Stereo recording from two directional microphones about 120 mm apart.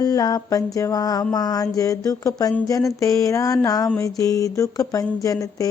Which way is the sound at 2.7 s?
25° left (ahead or behind).